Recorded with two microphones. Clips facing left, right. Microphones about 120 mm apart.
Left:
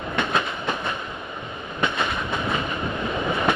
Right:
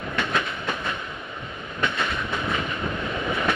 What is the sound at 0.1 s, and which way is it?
Train, 20° left (ahead or behind).